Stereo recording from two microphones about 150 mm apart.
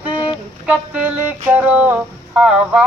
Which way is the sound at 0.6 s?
10° right (ahead or behind).